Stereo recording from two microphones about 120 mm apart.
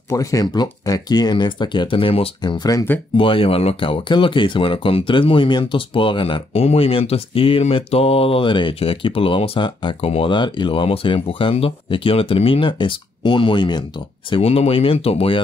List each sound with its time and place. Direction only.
0.1 s speech: 30° left (ahead or behind); by 2.3 s 50° left (ahead or behind)
2.4 s speech: 35° left (ahead or behind)
3.2 s speech: 50° left (ahead or behind)
14.4 s speech: 55° left (ahead or behind)